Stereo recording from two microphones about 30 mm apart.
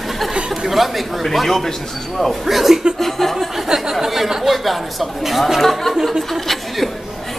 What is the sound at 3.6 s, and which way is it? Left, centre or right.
A woman's voice, centre.